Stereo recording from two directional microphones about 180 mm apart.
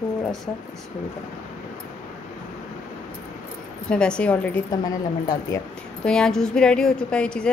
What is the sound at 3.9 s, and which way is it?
Speech, 5° left (ahead or behind).